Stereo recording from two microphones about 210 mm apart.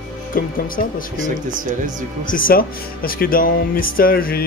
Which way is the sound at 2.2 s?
40° left (ahead or behind).